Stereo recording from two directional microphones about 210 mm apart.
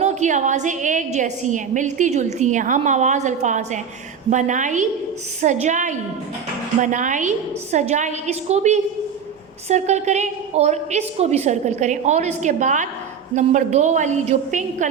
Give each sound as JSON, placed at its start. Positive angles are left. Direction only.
{"t": 0.0, "sound": "a woman's voice", "side_deg": -35}